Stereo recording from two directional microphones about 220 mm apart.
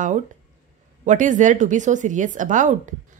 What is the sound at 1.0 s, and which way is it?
Speech, 35° right (ahead or behind).